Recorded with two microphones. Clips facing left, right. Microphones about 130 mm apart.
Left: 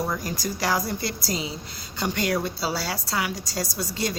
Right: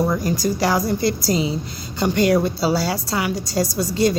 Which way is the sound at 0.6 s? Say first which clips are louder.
Right 5 dB; 25° right (ahead or behind).